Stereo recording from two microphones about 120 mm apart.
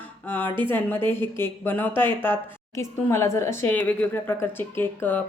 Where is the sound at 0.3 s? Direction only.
15° left (ahead or behind).